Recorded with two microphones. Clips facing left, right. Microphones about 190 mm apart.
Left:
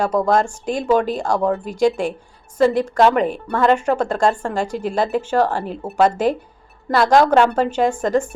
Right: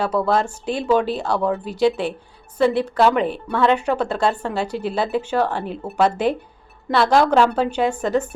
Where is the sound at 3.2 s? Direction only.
45° left (ahead or behind).